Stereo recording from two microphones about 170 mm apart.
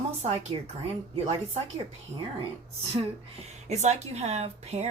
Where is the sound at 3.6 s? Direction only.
40° right (ahead or behind).